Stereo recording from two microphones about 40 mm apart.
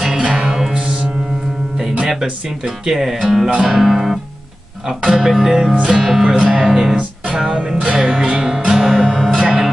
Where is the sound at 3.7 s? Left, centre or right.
Centre.